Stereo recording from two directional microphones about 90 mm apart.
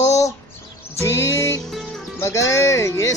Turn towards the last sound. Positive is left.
turn(degrees=35)  # may be behind; listen again after turning